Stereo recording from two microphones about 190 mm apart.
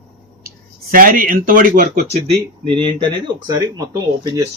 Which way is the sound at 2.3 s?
25° right (ahead or behind).